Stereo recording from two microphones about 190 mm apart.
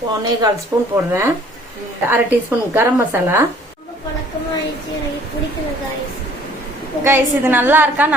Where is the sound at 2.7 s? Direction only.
10° right (ahead or behind).